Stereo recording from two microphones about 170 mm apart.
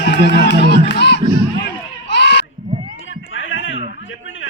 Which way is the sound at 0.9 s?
90° left.